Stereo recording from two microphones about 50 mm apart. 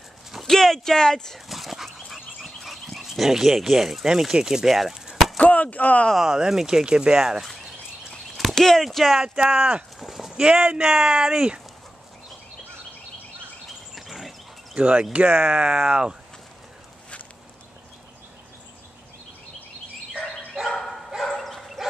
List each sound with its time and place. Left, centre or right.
0.3 s speech: centre
1.5 s dog: centre
2.4 s speech: centre
5.4 s speech: left
6.1 s speech: centre
8.4 s clip-clop: centre
8.8 s speech: centre
9.4 s speech: right
9.9 s a sound: centre
10.3 s speech: centre
13.9 s a sound: centre
14.8 s speech: right
20.6 s dog: centre